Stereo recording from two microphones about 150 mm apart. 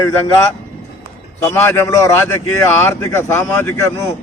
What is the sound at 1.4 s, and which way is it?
A man's voice, 15° left (ahead or behind).